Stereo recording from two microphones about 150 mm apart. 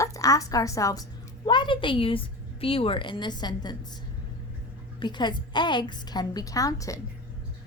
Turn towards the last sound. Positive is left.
turn(degrees=20)  # may be behind; listen again after turning